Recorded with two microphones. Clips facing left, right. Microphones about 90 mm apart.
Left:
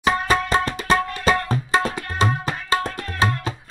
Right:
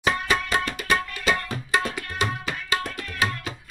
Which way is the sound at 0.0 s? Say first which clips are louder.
Left 4 dB; 35° left (ahead or behind).